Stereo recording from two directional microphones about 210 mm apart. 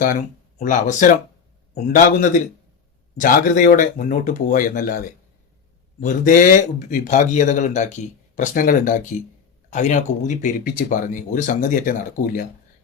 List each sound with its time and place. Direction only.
0.6 s speech: 40° left (ahead or behind)